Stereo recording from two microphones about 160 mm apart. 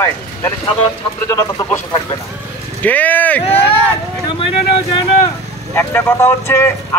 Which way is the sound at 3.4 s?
40° left (ahead or behind).